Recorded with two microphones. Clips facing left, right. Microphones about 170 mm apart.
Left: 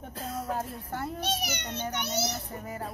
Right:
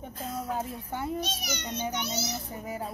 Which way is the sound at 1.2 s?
60° left (ahead or behind).